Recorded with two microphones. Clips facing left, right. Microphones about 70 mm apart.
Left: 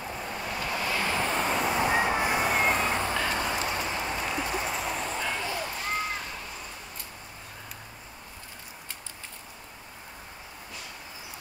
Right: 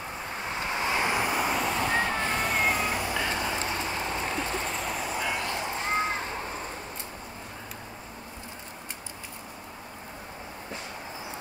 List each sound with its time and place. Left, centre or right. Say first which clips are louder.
0.4 s vehicle: right 2 dB; right; by 1.6 s centre
1.6 s vehicle: left 2 dB; centre
2.6 s vehicle: left 1 dB; centre
2.9 s vehicle: left 2 dB; left
3.8 s a sound: even; right
4.4 s vehicle: left 1 dB; centre
4.7 s vehicle: even; centre; by 6.8 s right